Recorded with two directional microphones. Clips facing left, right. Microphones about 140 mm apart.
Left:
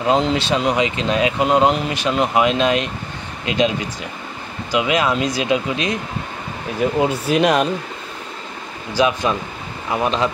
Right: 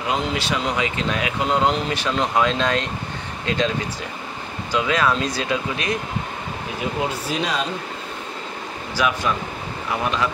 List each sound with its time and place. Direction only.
0.1 s speech: 25° left (ahead or behind)
4.7 s speech: 15° left (ahead or behind)
6.8 s speech: 45° left (ahead or behind)
7.2 s speech: 60° left (ahead or behind)
8.9 s speech: 20° left (ahead or behind)